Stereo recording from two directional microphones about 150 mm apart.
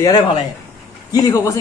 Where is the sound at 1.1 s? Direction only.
20° left (ahead or behind).